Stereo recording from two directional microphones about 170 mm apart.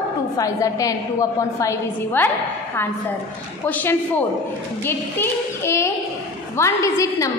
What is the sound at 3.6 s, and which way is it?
A woman's voice, 10° left (ahead or behind).